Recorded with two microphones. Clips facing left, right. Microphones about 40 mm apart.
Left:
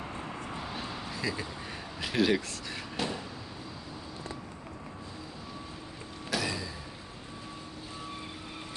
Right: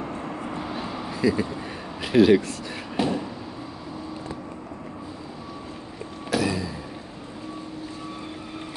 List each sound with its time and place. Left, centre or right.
0.1 s vehicle: centre
1.2 s speech: centre
3.0 s a sound: right
6.3 s vehicle: centre